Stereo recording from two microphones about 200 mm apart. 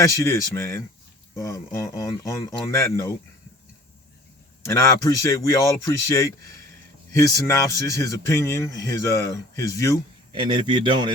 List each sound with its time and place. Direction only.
0.0 s speech: 15° left (ahead or behind)
4.6 s speech: 15° left (ahead or behind)
10.3 s a man's voice: 25° right (ahead or behind)